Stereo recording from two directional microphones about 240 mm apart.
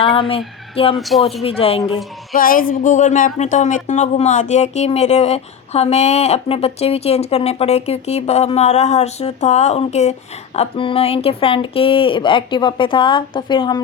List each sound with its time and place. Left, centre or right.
0.0 s speech: left
0.9 s speech: centre
1.4 s speech: left
2.3 s a woman's voice: left; by 13.8 s centre